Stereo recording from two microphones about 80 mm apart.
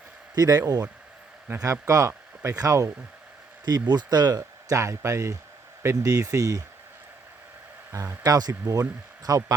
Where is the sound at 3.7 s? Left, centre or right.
Right.